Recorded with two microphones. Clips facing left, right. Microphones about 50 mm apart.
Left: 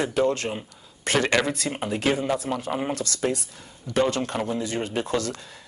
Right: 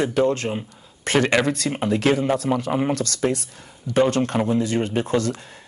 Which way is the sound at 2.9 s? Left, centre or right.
Right.